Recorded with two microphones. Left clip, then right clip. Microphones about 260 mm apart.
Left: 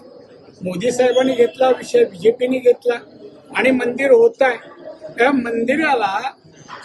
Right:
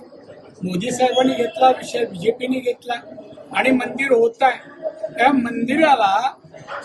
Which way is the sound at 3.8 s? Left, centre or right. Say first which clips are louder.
Left 4 dB; left.